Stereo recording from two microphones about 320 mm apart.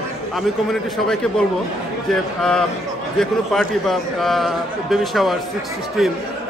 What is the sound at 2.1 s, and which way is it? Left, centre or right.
A man's voice, centre.